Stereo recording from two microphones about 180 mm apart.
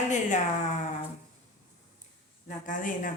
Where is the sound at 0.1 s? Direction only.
40° left (ahead or behind).